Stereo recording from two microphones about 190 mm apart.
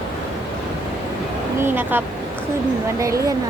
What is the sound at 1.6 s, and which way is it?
Speech, 10° right (ahead or behind).